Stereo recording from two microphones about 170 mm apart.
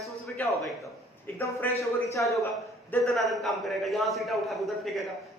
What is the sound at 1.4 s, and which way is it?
Speech, 15° left (ahead or behind).